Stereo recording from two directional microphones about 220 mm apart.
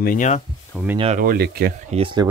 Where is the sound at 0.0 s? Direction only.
35° left (ahead or behind).